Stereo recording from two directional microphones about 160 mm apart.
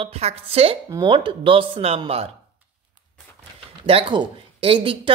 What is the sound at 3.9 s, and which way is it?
Speech, 35° right (ahead or behind).